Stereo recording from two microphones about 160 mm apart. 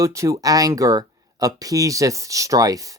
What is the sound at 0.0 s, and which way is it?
Speech, 20° right (ahead or behind).